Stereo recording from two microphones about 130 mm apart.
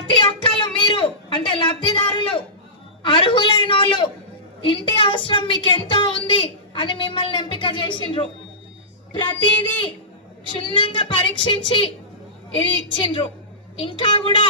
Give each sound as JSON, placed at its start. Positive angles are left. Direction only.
{"t": 0.1, "sound": "a sound", "side_deg": 40}
{"t": 3.0, "sound": "a woman's voice", "side_deg": 40}
{"t": 10.7, "sound": "a woman's voice", "side_deg": 40}